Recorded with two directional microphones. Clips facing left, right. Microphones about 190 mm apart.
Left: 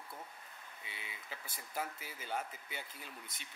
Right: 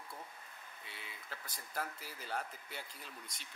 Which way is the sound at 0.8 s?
Centre (ahead or behind).